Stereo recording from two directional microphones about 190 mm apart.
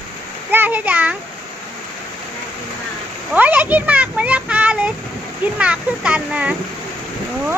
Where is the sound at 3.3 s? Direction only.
10° right (ahead or behind).